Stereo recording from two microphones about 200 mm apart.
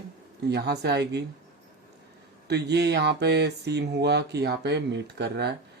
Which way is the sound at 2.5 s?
55° right (ahead or behind).